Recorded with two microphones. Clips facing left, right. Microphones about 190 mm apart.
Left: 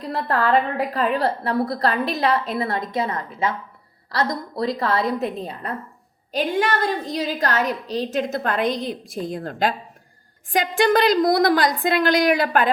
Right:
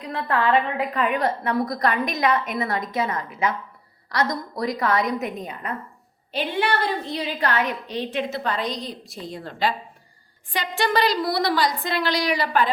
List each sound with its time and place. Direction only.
0.0 s a woman's voice: 35° left (ahead or behind)
6.3 s a woman's voice: 45° left (ahead or behind)